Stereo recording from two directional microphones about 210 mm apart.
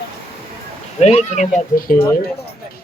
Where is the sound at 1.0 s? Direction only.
30° left (ahead or behind).